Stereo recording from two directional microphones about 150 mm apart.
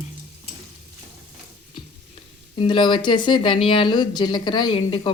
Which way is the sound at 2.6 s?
30° left (ahead or behind).